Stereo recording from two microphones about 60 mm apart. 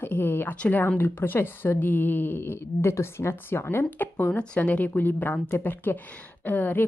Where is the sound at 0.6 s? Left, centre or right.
Left.